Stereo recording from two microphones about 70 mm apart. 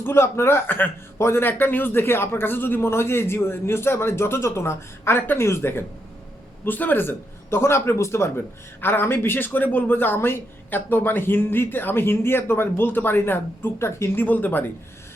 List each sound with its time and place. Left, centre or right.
0.0 s speech: left
14.3 s speech: left